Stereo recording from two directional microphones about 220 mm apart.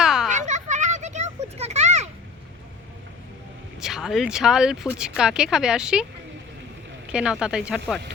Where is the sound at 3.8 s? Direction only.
Centre (ahead or behind).